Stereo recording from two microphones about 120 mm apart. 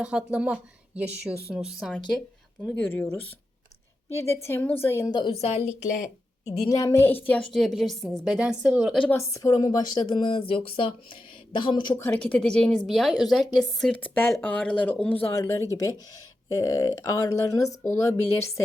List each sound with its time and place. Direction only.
0.0 s a woman's voice: 10° right (ahead or behind)
2.7 s speech: 15° left (ahead or behind)
5.3 s a woman's voice: 60° left (ahead or behind)
6.7 s speech: 25° left (ahead or behind)
7.5 s a woman's voice: centre (ahead or behind)
8.9 s speech: 10° left (ahead or behind)
9.1 s speech: 25° left (ahead or behind)
11.9 s a woman's voice: 15° left (ahead or behind)
13.9 s speech: 15° left (ahead or behind)
15.2 s speech: 25° left (ahead or behind)